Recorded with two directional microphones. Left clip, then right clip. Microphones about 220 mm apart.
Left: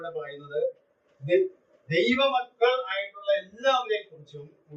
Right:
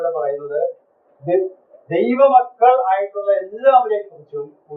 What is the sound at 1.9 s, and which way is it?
A man's voice, 55° left (ahead or behind).